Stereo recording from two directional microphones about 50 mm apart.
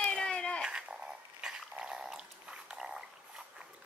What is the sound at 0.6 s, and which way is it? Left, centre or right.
Dog, centre.